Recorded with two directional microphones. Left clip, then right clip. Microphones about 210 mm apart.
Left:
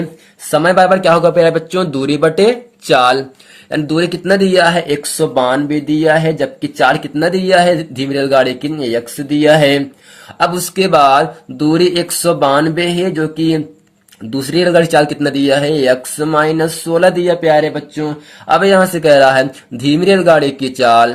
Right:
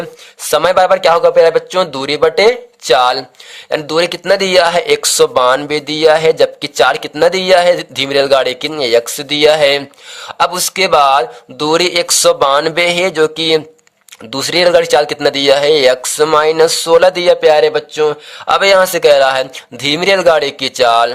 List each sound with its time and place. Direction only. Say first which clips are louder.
0.5 s a man's voice: even; 40° right (ahead or behind)